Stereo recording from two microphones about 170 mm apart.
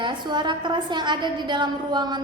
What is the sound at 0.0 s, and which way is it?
A woman's voice, 25° right (ahead or behind).